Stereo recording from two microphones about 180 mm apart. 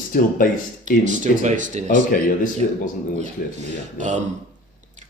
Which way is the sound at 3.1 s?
40° right (ahead or behind).